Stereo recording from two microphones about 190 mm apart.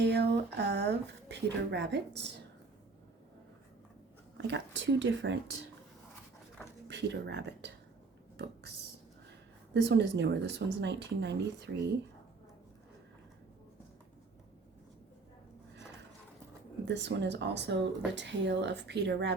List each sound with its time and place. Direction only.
0.0 s speech: 60° right (ahead or behind)
4.4 s speech: 65° right (ahead or behind)
6.8 s speech: 65° right (ahead or behind)
9.7 s speech: 65° right (ahead or behind)
16.8 s speech: 65° right (ahead or behind)